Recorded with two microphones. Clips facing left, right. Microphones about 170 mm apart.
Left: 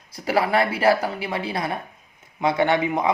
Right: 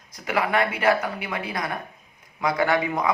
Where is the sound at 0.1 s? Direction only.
30° left (ahead or behind).